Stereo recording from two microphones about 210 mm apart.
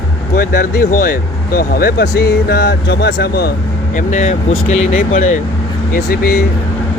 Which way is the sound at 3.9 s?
35° left (ahead or behind).